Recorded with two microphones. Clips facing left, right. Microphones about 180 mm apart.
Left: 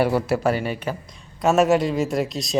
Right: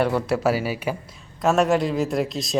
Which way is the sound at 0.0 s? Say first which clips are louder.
Left 1 dB; 5° left (ahead or behind).